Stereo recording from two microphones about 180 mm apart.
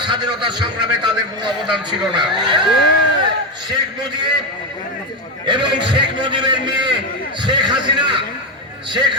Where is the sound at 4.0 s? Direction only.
25° right (ahead or behind).